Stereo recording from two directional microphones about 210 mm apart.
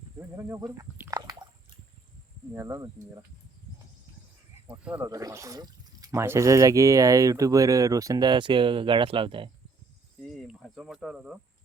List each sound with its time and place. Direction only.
0.3 s speech: 15° right (ahead or behind)
2.6 s speech: 15° right (ahead or behind)
4.7 s speech: 5° right (ahead or behind); by 9.5 s 25° right (ahead or behind)
10.3 s cricket: centre (ahead or behind)